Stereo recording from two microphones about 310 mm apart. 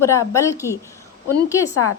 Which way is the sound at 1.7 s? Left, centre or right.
Left.